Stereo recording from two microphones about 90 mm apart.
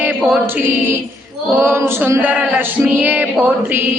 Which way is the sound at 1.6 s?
30° right (ahead or behind).